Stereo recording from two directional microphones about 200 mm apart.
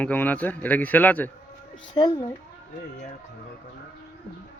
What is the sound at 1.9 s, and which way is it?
Speech, 20° left (ahead or behind).